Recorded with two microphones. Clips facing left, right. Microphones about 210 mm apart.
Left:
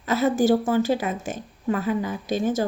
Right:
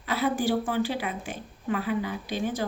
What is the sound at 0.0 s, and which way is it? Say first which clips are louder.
Speech: left 6 dB; 45° left (ahead or behind).